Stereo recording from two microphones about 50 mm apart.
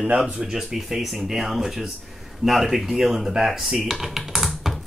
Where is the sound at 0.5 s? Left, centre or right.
Centre.